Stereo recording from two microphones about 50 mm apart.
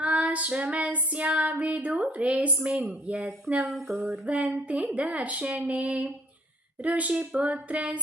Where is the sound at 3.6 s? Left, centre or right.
Centre.